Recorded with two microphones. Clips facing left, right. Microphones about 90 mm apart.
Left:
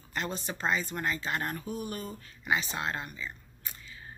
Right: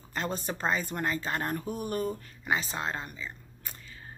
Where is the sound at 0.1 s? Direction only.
40° right (ahead or behind).